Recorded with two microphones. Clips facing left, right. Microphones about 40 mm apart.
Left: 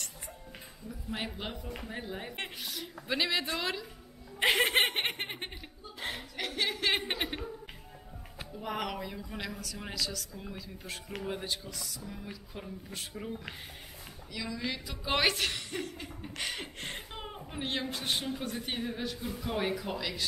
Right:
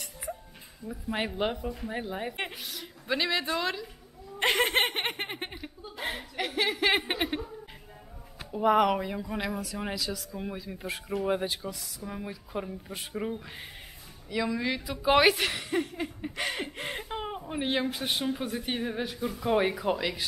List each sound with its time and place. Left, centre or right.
0.8 s speech: right
2.6 s a sound: centre
3.5 s a woman's voice: centre
8.6 s speech: centre
10.3 s speech: right
12.3 s speech: centre
14.9 s speech: centre